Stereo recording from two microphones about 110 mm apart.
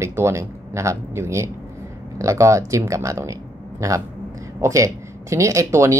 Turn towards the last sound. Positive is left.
turn(degrees=-30)  # may be behind; listen again after turning